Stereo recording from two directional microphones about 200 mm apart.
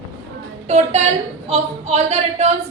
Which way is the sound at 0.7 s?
35° right (ahead or behind).